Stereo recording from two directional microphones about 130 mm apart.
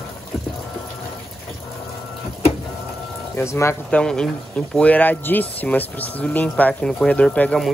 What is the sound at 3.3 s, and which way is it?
Speech, 20° left (ahead or behind).